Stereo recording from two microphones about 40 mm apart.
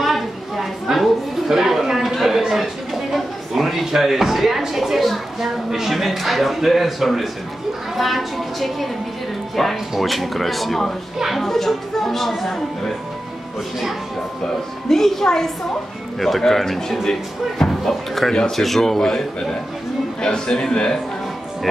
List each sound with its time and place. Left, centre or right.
0.0 s a sound: centre
7.9 s a woman's voice: centre
14.4 s a man's voice: centre